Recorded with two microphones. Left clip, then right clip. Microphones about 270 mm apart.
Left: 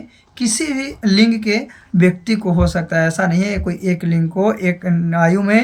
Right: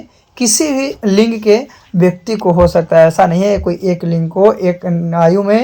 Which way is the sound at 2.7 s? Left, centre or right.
Centre.